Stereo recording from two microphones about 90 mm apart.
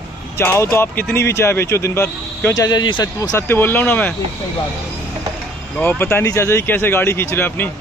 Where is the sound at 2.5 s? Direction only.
45° left (ahead or behind).